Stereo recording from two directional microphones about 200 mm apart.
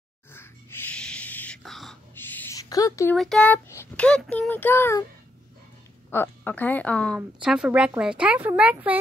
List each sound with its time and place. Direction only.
0.3 s a sound: 10° left (ahead or behind)
2.7 s speech: 15° left (ahead or behind)
3.2 s speech: 5° left (ahead or behind)
6.0 s speech: 10° left (ahead or behind)
7.2 s a woman's voice: 5° right (ahead or behind)